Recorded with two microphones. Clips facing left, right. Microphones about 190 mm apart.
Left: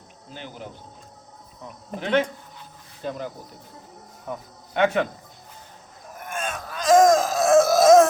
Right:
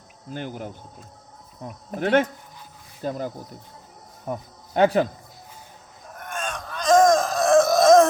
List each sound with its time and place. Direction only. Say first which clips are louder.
0.3 s speech: right 6 dB; 50° right (ahead or behind)
2.0 s speech: right 2 dB; 50° right (ahead or behind)
4.3 s cricket: right 3 dB; 35° right (ahead or behind)
6.1 s a sound: left 1 dB; 5° left (ahead or behind)